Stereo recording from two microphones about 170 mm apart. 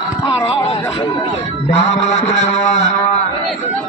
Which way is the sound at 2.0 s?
45° left (ahead or behind).